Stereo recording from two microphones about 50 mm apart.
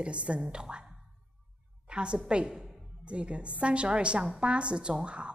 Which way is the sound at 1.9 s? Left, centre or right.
Centre.